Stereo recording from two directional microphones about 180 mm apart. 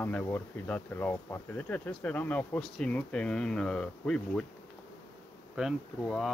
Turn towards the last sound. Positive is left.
turn(degrees=0)  # may be behind; listen again after turning